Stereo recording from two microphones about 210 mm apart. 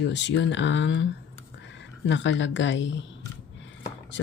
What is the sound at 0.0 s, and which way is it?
Speech, 55° left (ahead or behind).